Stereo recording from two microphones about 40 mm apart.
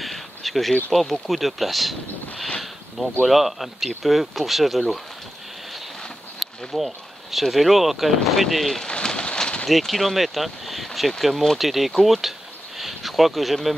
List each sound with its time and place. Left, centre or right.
0.0 s insect: centre
0.9 s speech: centre
6.4 s speech: centre
8.8 s bird: left
9.7 s speech: centre
12.0 s a sound: centre